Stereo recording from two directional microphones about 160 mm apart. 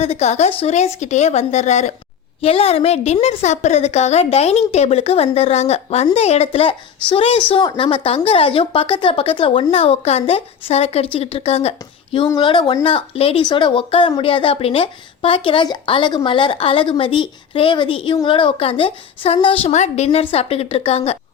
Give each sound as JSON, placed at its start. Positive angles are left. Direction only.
{"t": 0.0, "sound": "speech", "side_deg": 40}
{"t": 12.3, "sound": "speech", "side_deg": 30}